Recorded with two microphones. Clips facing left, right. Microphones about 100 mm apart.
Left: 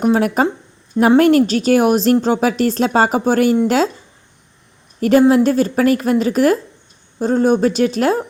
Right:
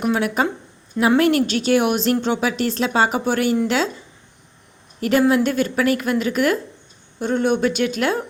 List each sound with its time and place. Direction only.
0.0 s a woman's voice: 40° left (ahead or behind)
4.9 s a woman's voice: 40° left (ahead or behind)